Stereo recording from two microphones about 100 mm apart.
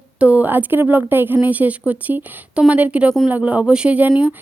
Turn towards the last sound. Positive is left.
turn(degrees=-15)  # may be behind; listen again after turning